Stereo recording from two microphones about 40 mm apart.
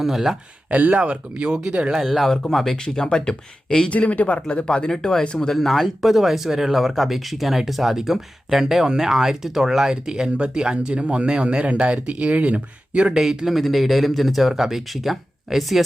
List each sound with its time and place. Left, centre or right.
0.0 s speech: centre
0.7 s speech: right
2.0 s speech: centre
2.3 s speech: centre
3.8 s speech: left
5.5 s speech: centre; by 13.1 s right
13.1 s speech: centre